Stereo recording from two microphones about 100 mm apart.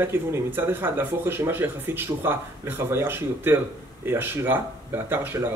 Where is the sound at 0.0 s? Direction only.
25° right (ahead or behind).